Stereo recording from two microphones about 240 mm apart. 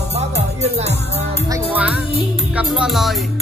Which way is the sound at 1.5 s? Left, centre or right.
Centre.